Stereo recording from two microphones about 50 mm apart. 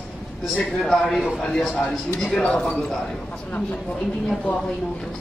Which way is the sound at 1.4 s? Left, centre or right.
Centre.